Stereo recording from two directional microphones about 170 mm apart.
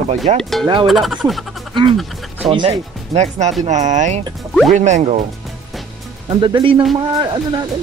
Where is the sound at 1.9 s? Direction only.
Centre (ahead or behind).